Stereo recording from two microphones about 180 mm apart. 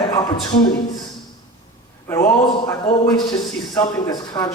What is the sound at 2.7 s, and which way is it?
A man's voice, 20° left (ahead or behind).